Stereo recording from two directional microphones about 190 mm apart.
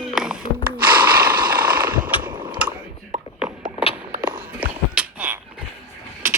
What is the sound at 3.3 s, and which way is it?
Clip-clop, 5° right (ahead or behind).